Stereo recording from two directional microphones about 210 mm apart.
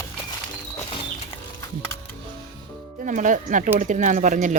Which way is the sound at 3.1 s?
40° right (ahead or behind).